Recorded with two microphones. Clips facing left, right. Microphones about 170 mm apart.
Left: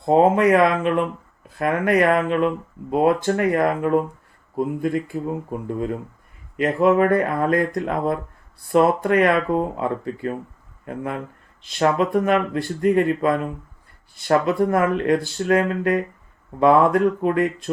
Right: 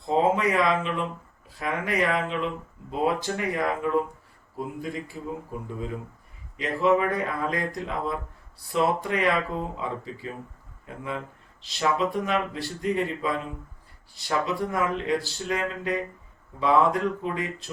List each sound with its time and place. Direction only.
0.0 s speech: 55° left (ahead or behind)